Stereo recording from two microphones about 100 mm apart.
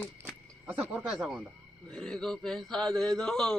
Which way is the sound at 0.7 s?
15° right (ahead or behind).